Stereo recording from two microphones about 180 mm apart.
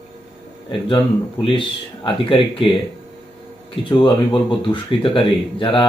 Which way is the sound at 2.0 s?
30° left (ahead or behind).